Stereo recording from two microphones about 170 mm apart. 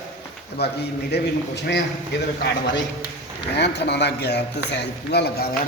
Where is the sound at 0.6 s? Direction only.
75° left (ahead or behind).